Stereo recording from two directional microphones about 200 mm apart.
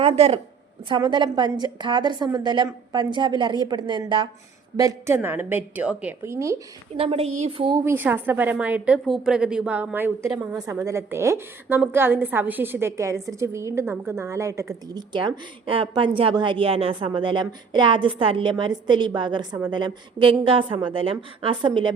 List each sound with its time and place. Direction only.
0.0 s a woman's voice: 30° right (ahead or behind)
6.9 s a woman's voice: 30° right (ahead or behind)
7.9 s a woman's voice: 10° right (ahead or behind)